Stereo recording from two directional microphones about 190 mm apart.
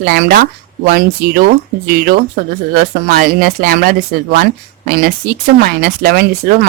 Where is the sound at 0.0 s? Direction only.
50° right (ahead or behind).